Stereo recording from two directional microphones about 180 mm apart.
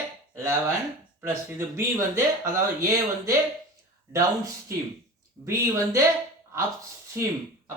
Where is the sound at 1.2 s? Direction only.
15° right (ahead or behind).